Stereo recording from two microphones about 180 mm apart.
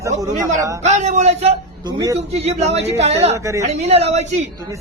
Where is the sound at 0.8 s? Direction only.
40° right (ahead or behind).